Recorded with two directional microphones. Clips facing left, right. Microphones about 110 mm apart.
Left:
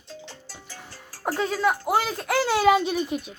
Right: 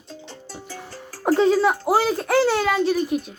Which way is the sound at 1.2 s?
25° right (ahead or behind).